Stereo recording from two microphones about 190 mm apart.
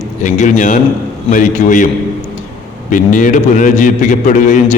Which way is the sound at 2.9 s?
45° left (ahead or behind).